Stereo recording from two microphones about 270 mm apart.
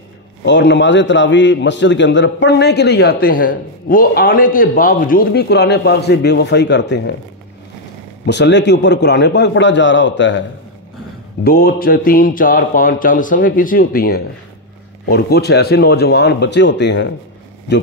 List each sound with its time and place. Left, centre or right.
0.5 s a man's voice: left
8.3 s a man's voice: left
11.4 s a man's voice: left